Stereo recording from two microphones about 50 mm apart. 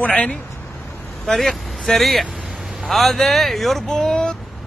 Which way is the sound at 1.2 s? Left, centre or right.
Centre.